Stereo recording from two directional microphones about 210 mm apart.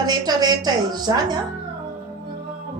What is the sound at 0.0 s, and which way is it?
A woman's voice, 20° right (ahead or behind).